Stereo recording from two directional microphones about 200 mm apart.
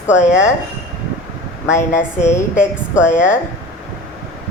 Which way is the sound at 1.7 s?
40° left (ahead or behind).